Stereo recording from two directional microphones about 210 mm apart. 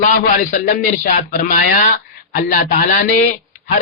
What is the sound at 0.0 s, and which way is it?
A man's voice, 40° left (ahead or behind).